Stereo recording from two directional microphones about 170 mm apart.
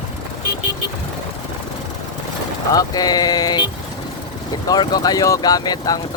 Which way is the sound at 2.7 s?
20° left (ahead or behind).